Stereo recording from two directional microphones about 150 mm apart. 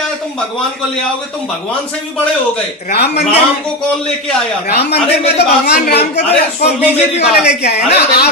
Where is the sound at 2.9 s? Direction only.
90° left.